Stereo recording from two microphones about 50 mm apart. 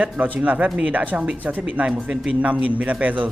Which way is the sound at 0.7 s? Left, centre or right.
Right.